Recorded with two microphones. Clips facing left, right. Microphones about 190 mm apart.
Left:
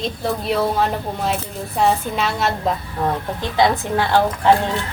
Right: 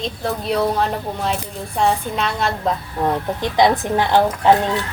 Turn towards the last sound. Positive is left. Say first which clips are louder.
# right 1 dB
turn(degrees=-20)  # may be behind; listen again after turning